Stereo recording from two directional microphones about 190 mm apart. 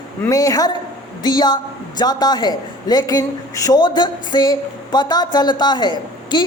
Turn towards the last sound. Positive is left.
turn(degrees=25)  # may be behind; listen again after turning